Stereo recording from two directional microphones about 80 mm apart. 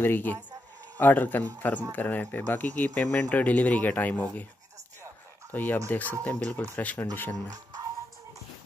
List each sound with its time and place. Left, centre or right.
0.0 s speech: left
5.5 s speech: left